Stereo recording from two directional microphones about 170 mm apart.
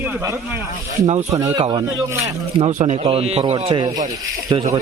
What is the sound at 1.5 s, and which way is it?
Speech, 25° right (ahead or behind).